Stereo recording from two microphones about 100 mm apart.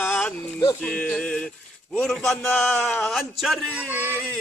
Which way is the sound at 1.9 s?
5° left (ahead or behind).